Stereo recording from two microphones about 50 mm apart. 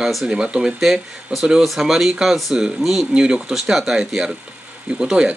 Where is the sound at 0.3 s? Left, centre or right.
Centre.